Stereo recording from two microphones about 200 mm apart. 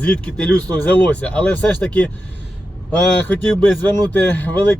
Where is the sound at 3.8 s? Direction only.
10° left (ahead or behind).